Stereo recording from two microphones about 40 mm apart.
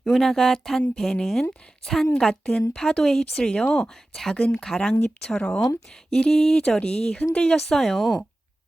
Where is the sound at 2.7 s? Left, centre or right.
Centre.